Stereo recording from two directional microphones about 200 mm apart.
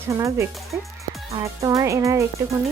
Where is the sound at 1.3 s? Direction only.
15° right (ahead or behind).